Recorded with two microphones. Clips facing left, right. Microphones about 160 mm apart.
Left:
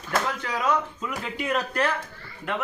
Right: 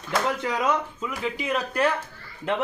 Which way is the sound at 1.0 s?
5° right (ahead or behind).